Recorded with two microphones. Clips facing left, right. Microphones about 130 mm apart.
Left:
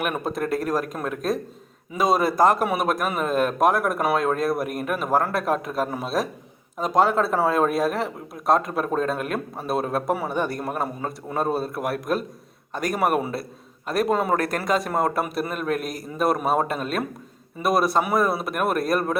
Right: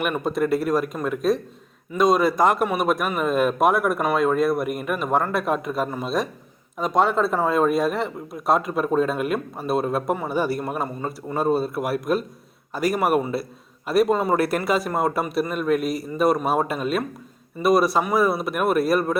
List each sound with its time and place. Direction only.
0.0 s speech: 5° left (ahead or behind)